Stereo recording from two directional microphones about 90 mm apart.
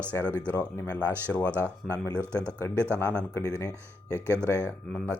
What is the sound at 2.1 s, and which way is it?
Speech, 25° right (ahead or behind).